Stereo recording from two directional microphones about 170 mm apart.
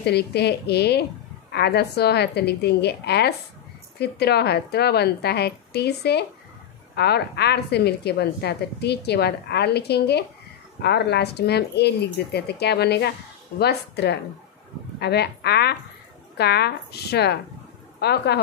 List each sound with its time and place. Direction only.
0.0 s a woman's voice: 75° left (ahead or behind)